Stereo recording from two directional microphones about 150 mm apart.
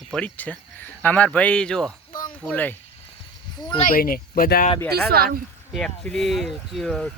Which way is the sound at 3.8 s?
70° left (ahead or behind).